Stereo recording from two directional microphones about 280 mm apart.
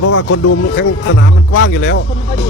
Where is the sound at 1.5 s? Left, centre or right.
Left.